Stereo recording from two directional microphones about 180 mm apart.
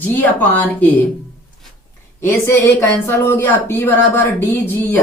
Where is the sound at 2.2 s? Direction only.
10° left (ahead or behind).